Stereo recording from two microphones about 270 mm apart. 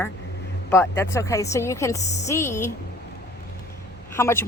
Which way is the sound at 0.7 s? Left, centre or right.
Centre.